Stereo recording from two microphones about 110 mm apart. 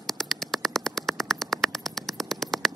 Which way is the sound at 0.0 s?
Centre (ahead or behind).